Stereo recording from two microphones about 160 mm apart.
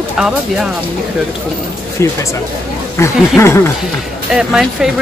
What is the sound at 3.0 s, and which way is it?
Speech, 15° left (ahead or behind).